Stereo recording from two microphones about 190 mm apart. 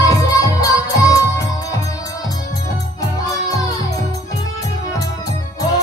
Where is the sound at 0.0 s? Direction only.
20° left (ahead or behind).